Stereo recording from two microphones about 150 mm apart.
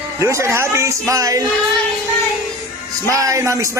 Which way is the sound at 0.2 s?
20° right (ahead or behind).